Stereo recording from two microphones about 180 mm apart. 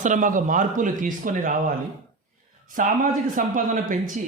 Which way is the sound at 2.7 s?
45° right (ahead or behind).